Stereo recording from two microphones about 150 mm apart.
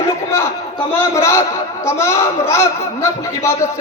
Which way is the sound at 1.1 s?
20° left (ahead or behind).